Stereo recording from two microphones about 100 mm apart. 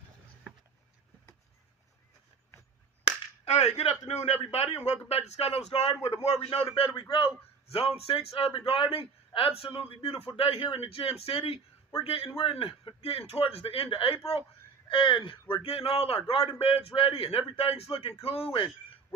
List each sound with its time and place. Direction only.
3.4 s cap gun: 90° left
4.0 s speech: 80° left
6.7 s a man's voice: 65° left (ahead or behind)
7.7 s a man's voice: 85° left
14.8 s a man's voice: 60° left (ahead or behind)